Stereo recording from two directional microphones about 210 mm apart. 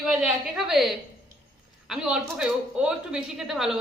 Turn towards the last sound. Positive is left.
turn(degrees=0)  # may be behind; listen again after turning